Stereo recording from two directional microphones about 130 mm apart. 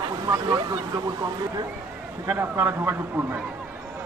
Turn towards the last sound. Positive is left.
turn(degrees=-15)  # may be behind; listen again after turning